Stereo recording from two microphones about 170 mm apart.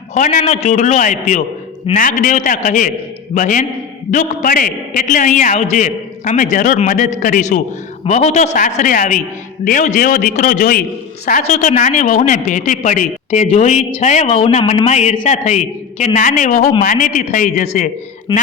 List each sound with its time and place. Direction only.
0.1 s a woman's voice: 45° left (ahead or behind)
14.6 s a man's voice: 30° left (ahead or behind)
14.8 s a woman's voice: 40° left (ahead or behind)